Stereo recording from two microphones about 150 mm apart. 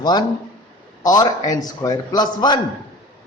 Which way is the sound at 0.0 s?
30° left (ahead or behind).